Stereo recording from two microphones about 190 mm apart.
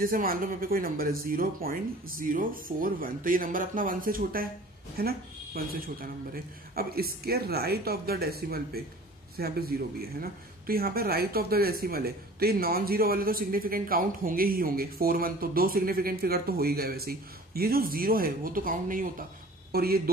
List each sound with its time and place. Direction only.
0.0 s speech: 50° right (ahead or behind)